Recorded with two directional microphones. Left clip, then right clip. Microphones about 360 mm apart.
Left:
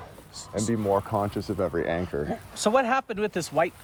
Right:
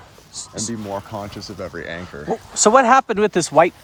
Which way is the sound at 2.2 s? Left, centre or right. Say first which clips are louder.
Right 10 dB; centre.